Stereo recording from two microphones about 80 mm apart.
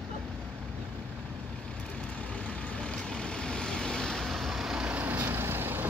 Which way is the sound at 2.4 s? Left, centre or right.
Centre.